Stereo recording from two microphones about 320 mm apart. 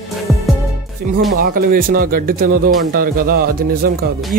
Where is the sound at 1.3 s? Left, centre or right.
Right.